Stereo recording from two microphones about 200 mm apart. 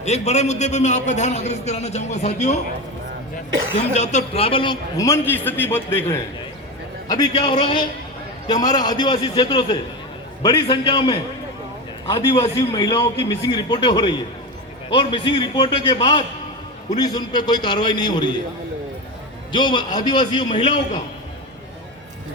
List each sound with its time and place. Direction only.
0.0 s a man's voice: 35° left (ahead or behind)
3.8 s a man's voice: 35° left (ahead or behind)
19.5 s a man's voice: 25° left (ahead or behind)